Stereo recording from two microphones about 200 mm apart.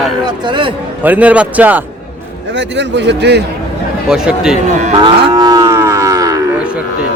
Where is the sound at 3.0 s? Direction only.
55° right (ahead or behind).